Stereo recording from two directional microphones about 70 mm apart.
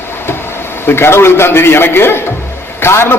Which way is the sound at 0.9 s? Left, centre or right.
Left.